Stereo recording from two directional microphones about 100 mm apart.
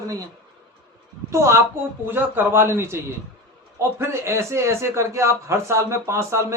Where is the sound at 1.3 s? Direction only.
30° right (ahead or behind).